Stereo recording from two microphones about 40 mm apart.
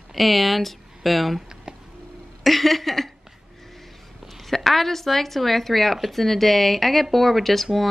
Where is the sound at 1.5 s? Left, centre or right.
Centre.